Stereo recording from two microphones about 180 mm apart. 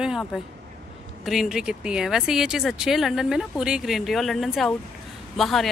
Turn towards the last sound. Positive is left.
turn(degrees=0)  # may be behind; listen again after turning